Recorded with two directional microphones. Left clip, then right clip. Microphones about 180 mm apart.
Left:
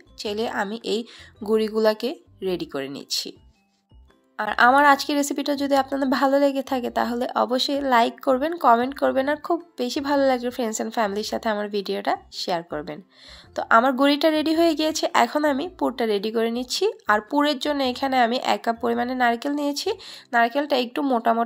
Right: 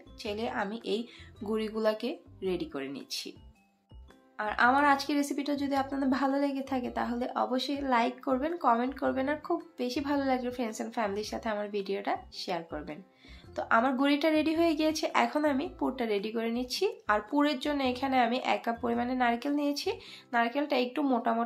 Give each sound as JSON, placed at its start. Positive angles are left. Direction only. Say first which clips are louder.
{"t": 0.2, "sound": "a woman's voice", "louder": "left 8 dB", "side_deg": 40}
{"t": 4.4, "sound": "a woman's voice", "louder": "left 9 dB", "side_deg": 50}